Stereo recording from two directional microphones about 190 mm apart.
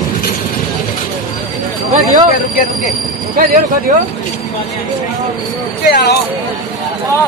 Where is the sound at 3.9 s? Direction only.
40° right (ahead or behind).